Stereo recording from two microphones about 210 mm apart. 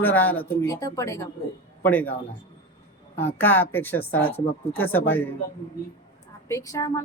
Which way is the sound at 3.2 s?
10° left (ahead or behind).